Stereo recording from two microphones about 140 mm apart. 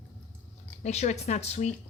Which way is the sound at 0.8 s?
55° left (ahead or behind).